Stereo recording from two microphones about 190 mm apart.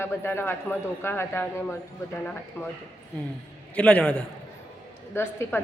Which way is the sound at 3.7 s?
5° left (ahead or behind).